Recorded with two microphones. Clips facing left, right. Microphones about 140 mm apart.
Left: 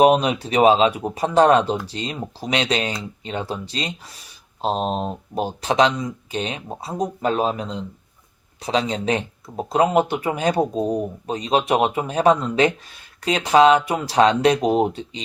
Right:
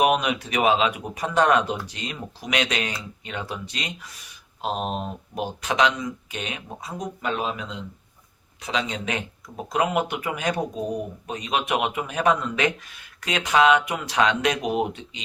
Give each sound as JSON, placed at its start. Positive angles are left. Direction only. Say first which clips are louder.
{"t": 0.0, "sound": "speech", "louder": "left 6 dB", "side_deg": 30}